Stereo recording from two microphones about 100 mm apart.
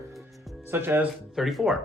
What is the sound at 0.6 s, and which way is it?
Speech, 20° right (ahead or behind).